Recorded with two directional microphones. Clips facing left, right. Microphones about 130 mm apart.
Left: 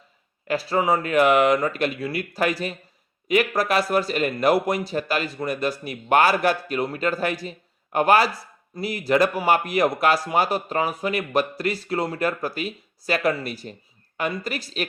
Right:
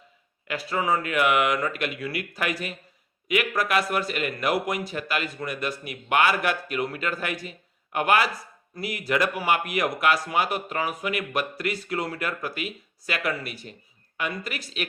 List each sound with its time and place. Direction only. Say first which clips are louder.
0.4 s speech: left 5 dB; 35° left (ahead or behind)